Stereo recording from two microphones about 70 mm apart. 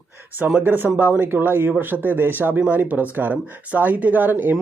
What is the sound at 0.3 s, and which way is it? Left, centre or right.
Speech, right.